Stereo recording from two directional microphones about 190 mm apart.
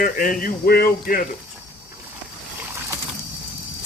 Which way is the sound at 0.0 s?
45° left (ahead or behind).